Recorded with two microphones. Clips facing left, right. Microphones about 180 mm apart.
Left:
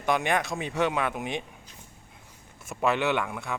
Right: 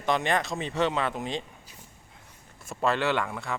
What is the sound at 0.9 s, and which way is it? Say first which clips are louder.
Speech: even; 15° left (ahead or behind).